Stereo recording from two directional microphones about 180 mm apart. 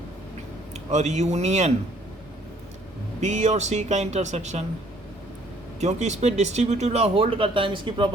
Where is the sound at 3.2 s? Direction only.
40° right (ahead or behind).